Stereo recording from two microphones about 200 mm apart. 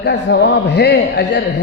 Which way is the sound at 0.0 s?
60° left (ahead or behind).